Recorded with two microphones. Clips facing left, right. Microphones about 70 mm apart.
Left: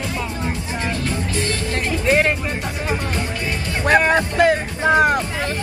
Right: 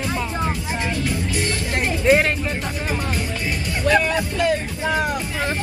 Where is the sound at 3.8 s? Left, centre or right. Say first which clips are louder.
Left 3 dB; left.